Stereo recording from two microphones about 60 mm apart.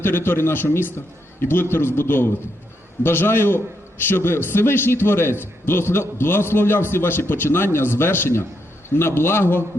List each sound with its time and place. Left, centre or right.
0.0 s a man's voice: left